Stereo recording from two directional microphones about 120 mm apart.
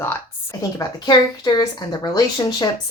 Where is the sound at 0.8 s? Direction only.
35° left (ahead or behind).